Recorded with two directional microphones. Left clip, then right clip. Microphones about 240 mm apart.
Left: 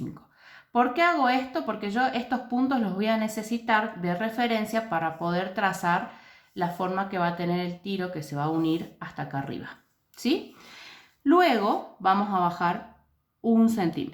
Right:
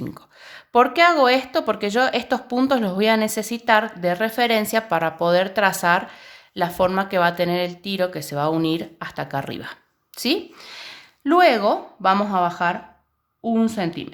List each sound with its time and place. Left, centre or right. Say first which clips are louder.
0.1 s speech: right 8 dB; right